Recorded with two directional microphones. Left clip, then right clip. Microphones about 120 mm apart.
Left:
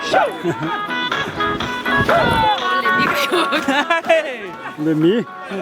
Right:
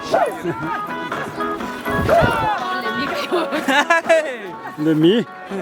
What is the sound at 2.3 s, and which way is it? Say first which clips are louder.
Speech: left 4 dB; 30° right (ahead or behind).